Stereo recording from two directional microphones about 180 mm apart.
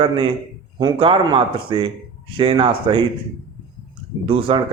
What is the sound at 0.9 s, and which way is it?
A man's voice, 30° right (ahead or behind).